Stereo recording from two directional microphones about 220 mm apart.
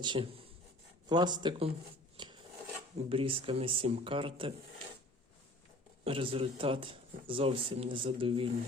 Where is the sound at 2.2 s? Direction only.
20° right (ahead or behind).